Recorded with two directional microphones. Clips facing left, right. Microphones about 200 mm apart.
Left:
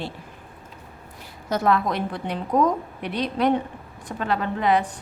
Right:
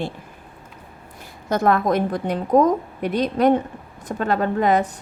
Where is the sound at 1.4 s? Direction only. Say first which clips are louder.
Right 3 dB; 50° right (ahead or behind).